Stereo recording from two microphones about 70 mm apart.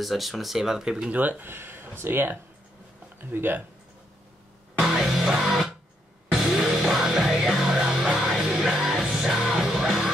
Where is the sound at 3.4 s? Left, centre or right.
Right.